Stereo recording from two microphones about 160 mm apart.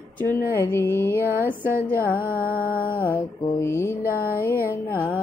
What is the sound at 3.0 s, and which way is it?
Mantra, 15° left (ahead or behind).